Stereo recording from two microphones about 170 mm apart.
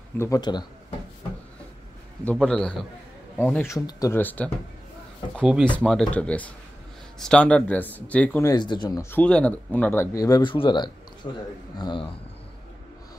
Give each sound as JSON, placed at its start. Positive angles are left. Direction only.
{"t": 0.2, "sound": "speech", "side_deg": 20}
{"t": 2.2, "sound": "a man's voice", "side_deg": 5}
{"t": 5.4, "sound": "a man's voice", "side_deg": -5}
{"t": 8.5, "sound": "speech", "side_deg": 25}
{"t": 9.1, "sound": "speech", "side_deg": 5}